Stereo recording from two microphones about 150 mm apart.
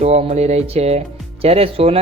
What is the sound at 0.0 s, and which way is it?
Speech, 45° right (ahead or behind).